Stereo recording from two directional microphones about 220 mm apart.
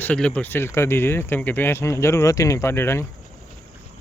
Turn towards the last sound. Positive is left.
turn(degrees=10)  # may be behind; listen again after turning